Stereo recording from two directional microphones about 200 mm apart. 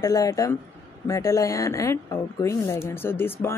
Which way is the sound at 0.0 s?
15° left (ahead or behind).